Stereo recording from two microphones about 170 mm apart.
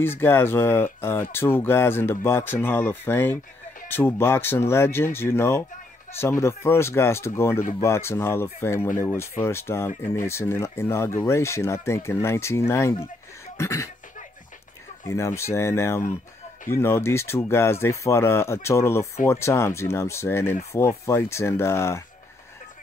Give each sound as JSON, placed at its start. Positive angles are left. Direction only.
{"t": 0.0, "sound": "speech", "side_deg": 15}
{"t": 13.6, "sound": "cough", "side_deg": 15}
{"t": 15.0, "sound": "speech", "side_deg": 15}